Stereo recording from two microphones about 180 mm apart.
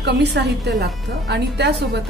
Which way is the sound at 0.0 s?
65° right (ahead or behind).